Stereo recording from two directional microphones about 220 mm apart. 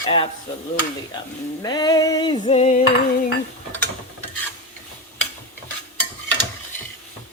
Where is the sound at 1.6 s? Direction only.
20° left (ahead or behind).